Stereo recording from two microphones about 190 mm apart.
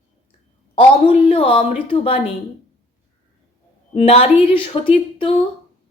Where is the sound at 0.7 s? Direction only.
30° left (ahead or behind).